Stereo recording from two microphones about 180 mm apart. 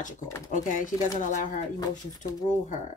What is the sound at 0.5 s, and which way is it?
Speech, 45° left (ahead or behind).